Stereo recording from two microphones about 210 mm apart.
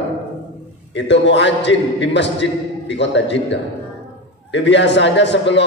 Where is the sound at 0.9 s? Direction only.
55° left (ahead or behind).